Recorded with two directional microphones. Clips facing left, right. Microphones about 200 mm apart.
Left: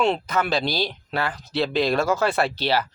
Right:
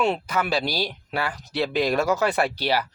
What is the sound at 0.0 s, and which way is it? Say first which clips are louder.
A woman's voice: left 2 dB; 10° right (ahead or behind).